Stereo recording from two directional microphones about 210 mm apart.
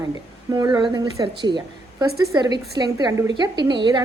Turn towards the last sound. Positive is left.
turn(degrees=-20)  # may be behind; listen again after turning